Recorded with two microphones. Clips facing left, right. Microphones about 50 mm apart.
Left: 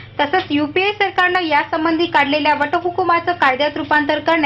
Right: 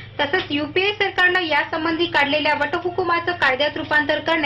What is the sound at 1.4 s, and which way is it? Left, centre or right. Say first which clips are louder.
A woman's voice: left 4 dB; left.